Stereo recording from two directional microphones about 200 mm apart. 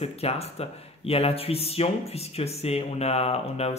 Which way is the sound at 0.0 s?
30° left (ahead or behind).